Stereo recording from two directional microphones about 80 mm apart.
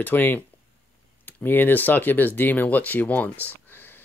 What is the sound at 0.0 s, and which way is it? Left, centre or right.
Speech, left.